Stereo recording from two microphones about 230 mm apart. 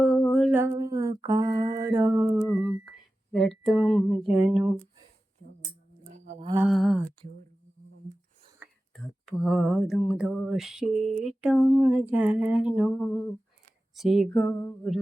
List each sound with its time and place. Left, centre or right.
0.0 s mantra: centre
6.1 s livestock: right
6.6 s mantra: centre
9.2 s mantra: centre